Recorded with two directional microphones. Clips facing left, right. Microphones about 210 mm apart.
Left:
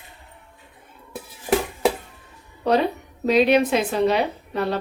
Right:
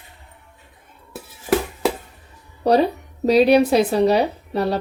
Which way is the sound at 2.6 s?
35° right (ahead or behind).